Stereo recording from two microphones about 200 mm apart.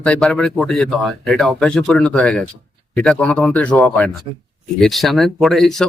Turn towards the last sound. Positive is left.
turn(degrees=0)  # may be behind; listen again after turning